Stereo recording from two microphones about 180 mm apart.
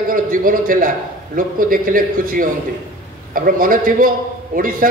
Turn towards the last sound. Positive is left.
turn(degrees=-50)  # may be behind; listen again after turning